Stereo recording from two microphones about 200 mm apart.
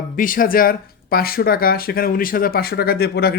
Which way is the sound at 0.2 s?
45° left (ahead or behind).